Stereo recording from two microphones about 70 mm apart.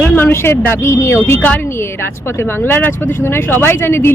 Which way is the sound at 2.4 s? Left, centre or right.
Left.